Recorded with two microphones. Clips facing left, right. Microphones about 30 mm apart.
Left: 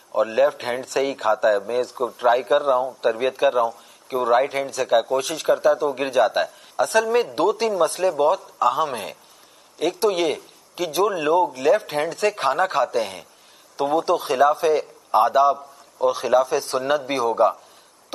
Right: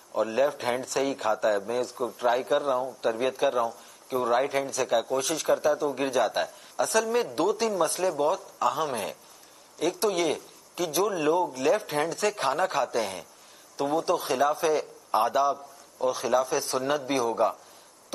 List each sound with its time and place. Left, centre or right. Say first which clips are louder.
0.1 s a man's voice: left 6 dB; centre